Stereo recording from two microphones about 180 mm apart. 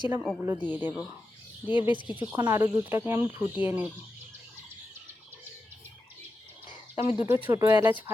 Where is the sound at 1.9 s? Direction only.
25° left (ahead or behind).